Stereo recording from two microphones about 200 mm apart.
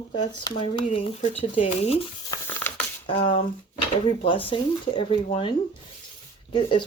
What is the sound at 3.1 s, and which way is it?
Speech, 25° left (ahead or behind).